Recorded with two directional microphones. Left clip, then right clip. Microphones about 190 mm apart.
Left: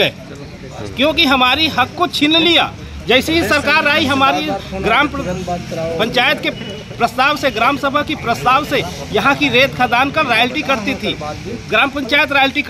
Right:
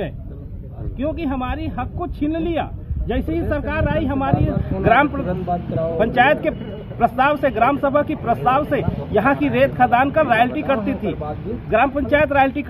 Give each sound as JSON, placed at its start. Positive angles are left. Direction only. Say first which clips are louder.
{"t": 0.9, "sound": "speech", "louder": "left 12 dB", "side_deg": 5}